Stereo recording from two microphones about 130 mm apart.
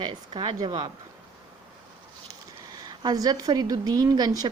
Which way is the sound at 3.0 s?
30° right (ahead or behind).